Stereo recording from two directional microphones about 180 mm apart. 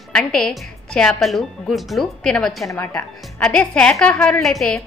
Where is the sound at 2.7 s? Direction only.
15° left (ahead or behind).